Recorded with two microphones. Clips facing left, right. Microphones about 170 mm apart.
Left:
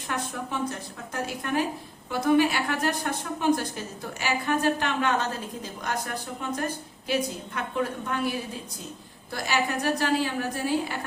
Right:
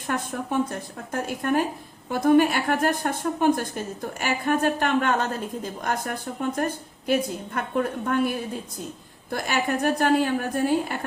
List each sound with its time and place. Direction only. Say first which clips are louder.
0.3 s a woman's voice: right 5 dB; 50° right (ahead or behind)